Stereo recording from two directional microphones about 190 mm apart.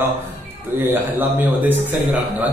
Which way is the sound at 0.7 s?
10° right (ahead or behind).